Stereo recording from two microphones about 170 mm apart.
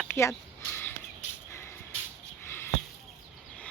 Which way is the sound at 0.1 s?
15° left (ahead or behind).